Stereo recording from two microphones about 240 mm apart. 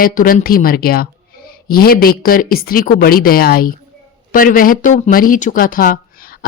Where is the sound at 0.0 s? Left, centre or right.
Left.